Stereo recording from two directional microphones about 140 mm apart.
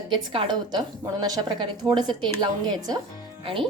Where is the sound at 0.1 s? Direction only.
35° right (ahead or behind).